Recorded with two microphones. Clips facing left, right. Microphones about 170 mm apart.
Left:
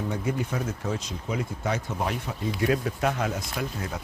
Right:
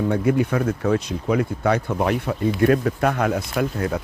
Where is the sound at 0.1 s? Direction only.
65° right (ahead or behind).